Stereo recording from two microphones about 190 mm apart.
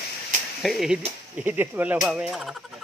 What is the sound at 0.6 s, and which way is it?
Speech, centre (ahead or behind).